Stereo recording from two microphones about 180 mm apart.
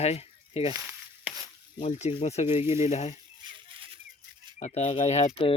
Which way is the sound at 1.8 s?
40° left (ahead or behind).